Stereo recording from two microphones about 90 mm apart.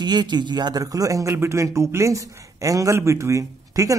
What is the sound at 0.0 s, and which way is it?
A man's voice, 55° right (ahead or behind).